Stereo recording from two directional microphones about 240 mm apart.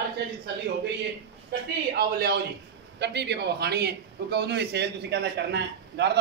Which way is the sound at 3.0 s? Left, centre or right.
Right.